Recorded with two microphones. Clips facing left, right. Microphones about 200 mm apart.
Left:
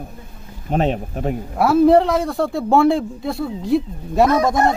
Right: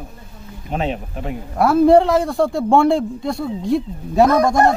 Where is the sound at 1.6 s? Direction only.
Centre (ahead or behind).